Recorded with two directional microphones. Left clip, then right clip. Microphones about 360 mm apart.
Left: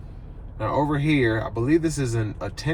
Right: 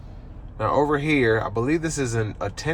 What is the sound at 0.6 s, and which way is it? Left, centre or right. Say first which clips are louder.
Speech: right 3 dB; centre.